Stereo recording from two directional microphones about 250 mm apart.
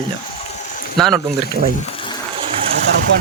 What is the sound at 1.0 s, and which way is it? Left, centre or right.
Speech, centre.